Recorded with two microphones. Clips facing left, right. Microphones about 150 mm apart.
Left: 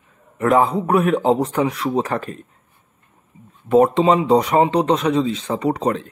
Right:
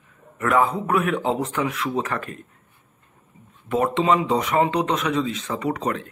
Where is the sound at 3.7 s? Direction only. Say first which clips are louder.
Left 6 dB; 35° left (ahead or behind).